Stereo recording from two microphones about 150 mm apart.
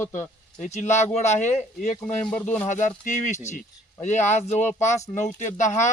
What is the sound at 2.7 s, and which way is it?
A man's voice, 55° left (ahead or behind).